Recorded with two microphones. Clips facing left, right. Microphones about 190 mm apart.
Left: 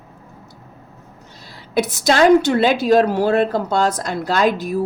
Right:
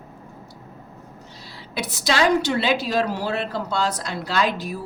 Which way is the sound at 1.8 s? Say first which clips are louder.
Left 7 dB; 45° left (ahead or behind).